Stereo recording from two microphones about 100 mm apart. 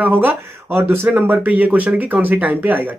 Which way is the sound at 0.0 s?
20° right (ahead or behind).